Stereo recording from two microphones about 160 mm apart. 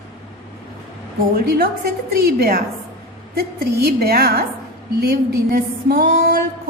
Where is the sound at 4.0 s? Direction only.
70° right (ahead or behind).